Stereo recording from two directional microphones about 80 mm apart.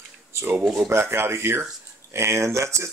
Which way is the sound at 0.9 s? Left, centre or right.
Right.